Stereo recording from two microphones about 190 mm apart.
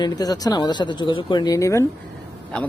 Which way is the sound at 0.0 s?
20° left (ahead or behind).